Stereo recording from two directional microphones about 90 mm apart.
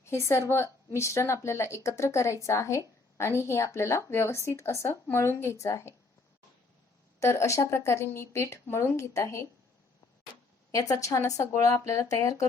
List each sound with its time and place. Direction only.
0.0 s a woman's voice: 30° left (ahead or behind)
7.2 s a woman's voice: 30° left (ahead or behind)
10.7 s a woman's voice: 40° left (ahead or behind)